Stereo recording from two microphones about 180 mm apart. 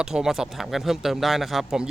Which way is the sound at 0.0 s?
5° right (ahead or behind).